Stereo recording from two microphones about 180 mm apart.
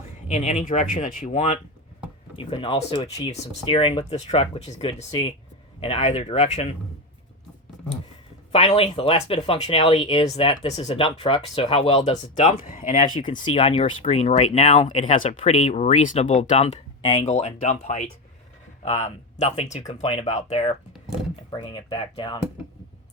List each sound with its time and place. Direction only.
0.3 s speech: 40° left (ahead or behind)
2.3 s speech: 30° left (ahead or behind)
8.5 s speech: 35° left (ahead or behind)
13.4 s speech: 35° left (ahead or behind)